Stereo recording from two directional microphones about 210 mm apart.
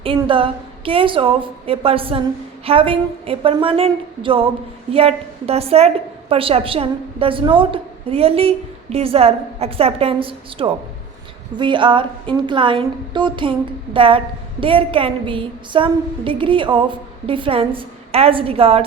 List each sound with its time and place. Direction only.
0.0 s a woman's voice: 25° right (ahead or behind)